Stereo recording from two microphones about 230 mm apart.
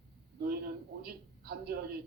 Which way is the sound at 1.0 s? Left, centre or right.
Right.